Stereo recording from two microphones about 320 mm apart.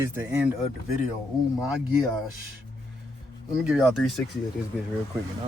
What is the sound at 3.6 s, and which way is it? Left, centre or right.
Speech, centre.